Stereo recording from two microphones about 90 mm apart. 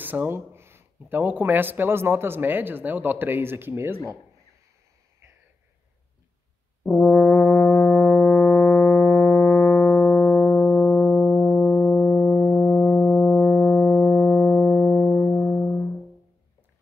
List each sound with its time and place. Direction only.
0.0 s speech: 20° right (ahead or behind)
6.8 s brass instrument: 15° left (ahead or behind)
12.5 s music: 15° left (ahead or behind)